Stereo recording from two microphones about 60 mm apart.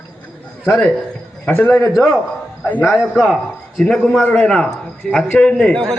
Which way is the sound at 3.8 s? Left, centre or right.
Centre.